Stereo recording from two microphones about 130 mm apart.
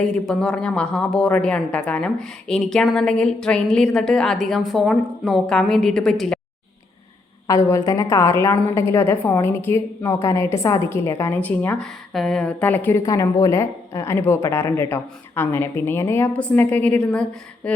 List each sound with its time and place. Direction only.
0.0 s a woman's voice: 5° left (ahead or behind)
7.4 s a woman's voice: 25° left (ahead or behind)
11.8 s a woman's voice: centre (ahead or behind)
13.0 s a woman's voice: 25° left (ahead or behind); by 17.7 s 10° left (ahead or behind)